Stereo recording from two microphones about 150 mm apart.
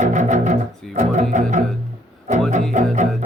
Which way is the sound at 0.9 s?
55° right (ahead or behind).